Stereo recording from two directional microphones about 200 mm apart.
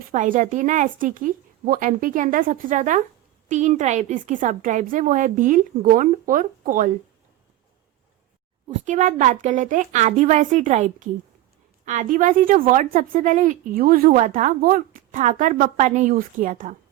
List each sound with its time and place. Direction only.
0.1 s a woman's voice: 40° right (ahead or behind)
8.6 s a woman's voice: 35° right (ahead or behind)